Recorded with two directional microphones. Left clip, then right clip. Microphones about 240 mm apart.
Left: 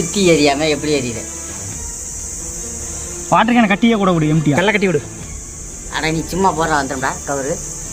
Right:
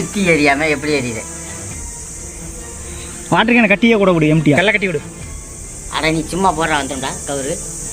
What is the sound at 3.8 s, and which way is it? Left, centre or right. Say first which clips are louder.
Speech: right 3 dB; left.